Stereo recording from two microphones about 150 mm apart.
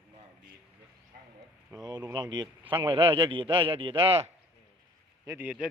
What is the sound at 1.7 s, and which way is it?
Mantra, 25° right (ahead or behind).